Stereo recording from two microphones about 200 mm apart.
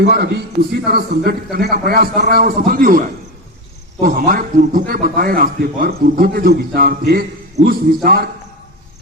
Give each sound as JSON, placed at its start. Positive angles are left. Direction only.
{"t": 0.0, "sound": "a man's voice", "side_deg": -55}
{"t": 4.0, "sound": "a man's voice", "side_deg": -45}